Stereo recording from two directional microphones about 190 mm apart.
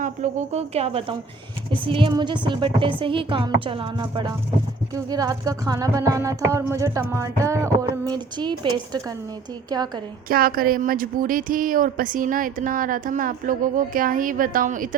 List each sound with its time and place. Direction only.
0.0 s a woman's voice: 35° right (ahead or behind)
4.9 s a sound: 20° right (ahead or behind)
9.6 s a woman's voice: 20° right (ahead or behind)
10.2 s speech: 50° right (ahead or behind)